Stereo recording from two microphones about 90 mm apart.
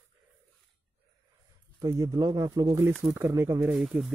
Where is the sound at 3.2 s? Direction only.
35° right (ahead or behind).